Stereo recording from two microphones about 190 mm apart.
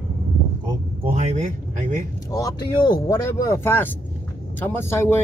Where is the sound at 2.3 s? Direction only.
20° left (ahead or behind).